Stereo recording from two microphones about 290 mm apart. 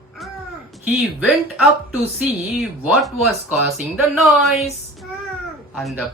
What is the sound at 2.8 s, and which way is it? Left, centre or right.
Speech, centre.